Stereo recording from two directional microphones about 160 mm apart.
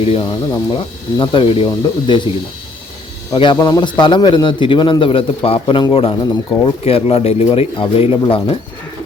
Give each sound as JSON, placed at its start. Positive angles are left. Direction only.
{"t": 0.0, "sound": "a man's voice", "side_deg": 35}
{"t": 3.3, "sound": "a man's voice", "side_deg": 30}